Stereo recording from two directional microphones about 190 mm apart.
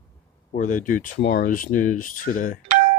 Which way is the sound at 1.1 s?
60° left (ahead or behind).